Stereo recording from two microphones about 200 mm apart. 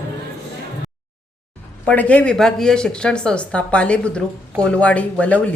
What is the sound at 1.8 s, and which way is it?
Speech, 5° left (ahead or behind).